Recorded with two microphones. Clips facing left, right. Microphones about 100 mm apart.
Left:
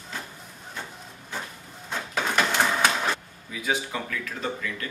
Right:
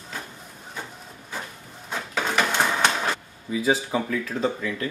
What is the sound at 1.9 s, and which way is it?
Printer, centre (ahead or behind).